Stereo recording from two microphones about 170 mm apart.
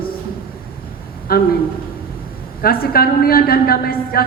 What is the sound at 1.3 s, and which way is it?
Speech, 60° left (ahead or behind).